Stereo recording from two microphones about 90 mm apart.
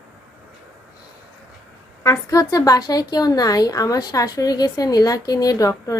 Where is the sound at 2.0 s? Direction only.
40° left (ahead or behind).